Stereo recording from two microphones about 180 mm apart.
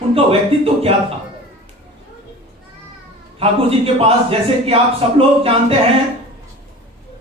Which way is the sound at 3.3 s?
30° right (ahead or behind).